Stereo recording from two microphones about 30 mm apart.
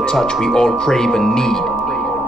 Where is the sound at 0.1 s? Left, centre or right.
Centre.